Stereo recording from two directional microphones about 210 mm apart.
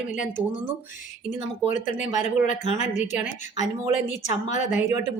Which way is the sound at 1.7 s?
35° left (ahead or behind).